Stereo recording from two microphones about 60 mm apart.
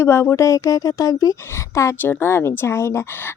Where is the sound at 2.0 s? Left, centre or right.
Left.